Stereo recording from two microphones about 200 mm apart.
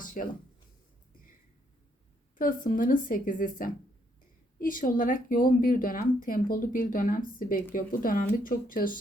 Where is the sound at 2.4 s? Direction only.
45° left (ahead or behind).